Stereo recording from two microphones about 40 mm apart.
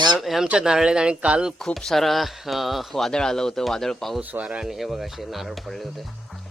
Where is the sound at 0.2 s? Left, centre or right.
Centre.